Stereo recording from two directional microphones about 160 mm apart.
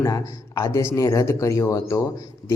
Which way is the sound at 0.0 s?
15° left (ahead or behind).